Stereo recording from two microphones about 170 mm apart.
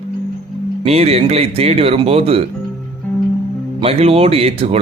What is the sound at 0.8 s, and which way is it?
Speech, 35° right (ahead or behind).